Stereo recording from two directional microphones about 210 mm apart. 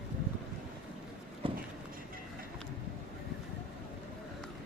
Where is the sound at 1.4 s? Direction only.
25° right (ahead or behind).